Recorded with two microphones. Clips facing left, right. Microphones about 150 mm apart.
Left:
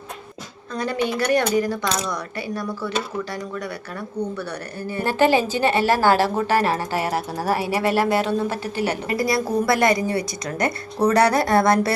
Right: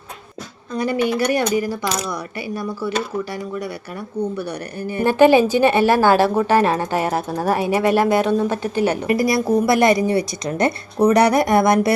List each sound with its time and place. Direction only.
0.7 s speech: 10° right (ahead or behind)
3.3 s speech: 10° right (ahead or behind)